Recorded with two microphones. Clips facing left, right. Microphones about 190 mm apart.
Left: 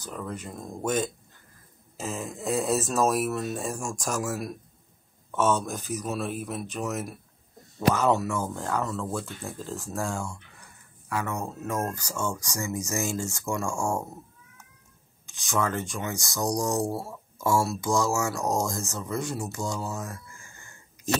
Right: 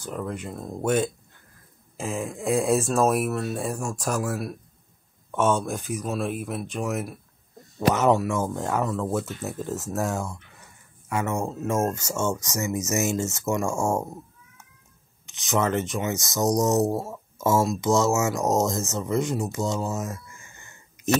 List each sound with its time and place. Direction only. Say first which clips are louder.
0.0 s speech: right 4 dB; 10° right (ahead or behind)
3.2 s speech: right 2 dB; centre (ahead or behind)
5.9 s speech: right 1 dB; 10° right (ahead or behind)
7.9 s speech: right 3 dB; 15° right (ahead or behind)
15.2 s speech: right 4 dB; 20° right (ahead or behind)